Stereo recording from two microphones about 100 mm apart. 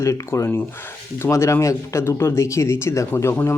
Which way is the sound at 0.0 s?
30° left (ahead or behind).